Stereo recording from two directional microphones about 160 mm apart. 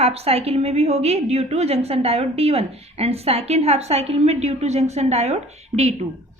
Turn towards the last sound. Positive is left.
turn(degrees=-45)  # may be behind; listen again after turning